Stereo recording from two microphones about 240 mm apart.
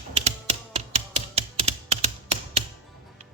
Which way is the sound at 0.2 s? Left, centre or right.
Right.